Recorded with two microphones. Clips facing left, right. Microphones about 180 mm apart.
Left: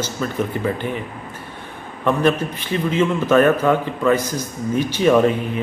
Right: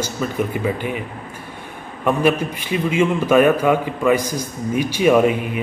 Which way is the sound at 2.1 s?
10° right (ahead or behind).